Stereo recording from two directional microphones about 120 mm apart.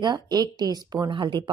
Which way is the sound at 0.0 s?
35° right (ahead or behind).